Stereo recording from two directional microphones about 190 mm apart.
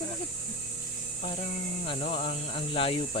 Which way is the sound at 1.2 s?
35° left (ahead or behind).